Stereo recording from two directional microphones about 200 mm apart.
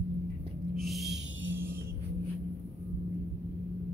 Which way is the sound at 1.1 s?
70° right (ahead or behind).